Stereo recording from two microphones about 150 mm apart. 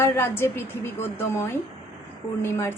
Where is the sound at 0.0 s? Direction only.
15° left (ahead or behind).